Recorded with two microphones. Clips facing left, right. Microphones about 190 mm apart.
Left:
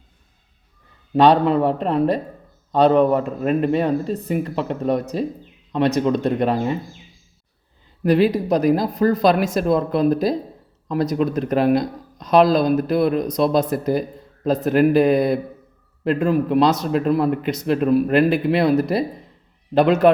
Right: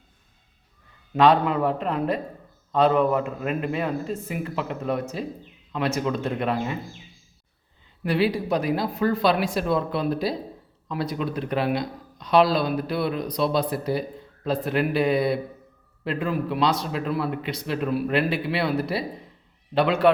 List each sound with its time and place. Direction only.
1.1 s a man's voice: 35° left (ahead or behind)
8.0 s speech: 40° left (ahead or behind)